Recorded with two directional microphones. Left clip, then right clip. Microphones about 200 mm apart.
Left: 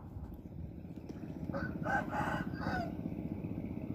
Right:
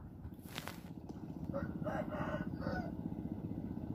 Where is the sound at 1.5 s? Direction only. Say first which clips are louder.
Left 6 dB; 50° left (ahead or behind).